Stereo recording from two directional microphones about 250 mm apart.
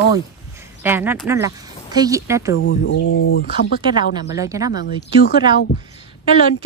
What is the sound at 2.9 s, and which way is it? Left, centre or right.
Speech, left.